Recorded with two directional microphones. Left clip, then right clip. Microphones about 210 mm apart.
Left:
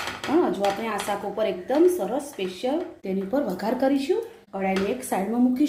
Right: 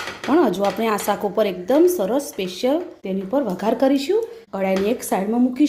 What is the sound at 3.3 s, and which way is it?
Speech, 25° right (ahead or behind).